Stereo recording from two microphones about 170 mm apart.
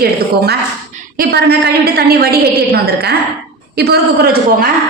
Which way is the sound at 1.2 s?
65° right (ahead or behind).